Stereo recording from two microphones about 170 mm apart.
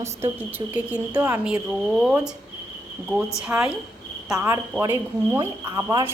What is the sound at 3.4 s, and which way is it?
A woman's voice, 10° right (ahead or behind).